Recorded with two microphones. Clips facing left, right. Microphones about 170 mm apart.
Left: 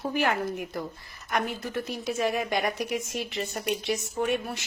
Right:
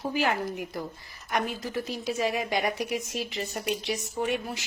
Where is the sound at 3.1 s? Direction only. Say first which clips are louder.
Left 1 dB; 55° left (ahead or behind).